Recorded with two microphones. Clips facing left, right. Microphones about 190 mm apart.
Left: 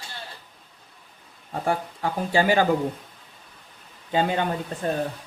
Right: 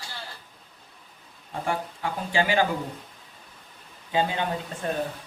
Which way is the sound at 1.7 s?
40° left (ahead or behind).